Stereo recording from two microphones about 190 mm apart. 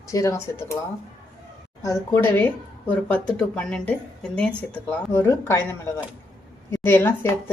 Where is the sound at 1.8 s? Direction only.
10° left (ahead or behind).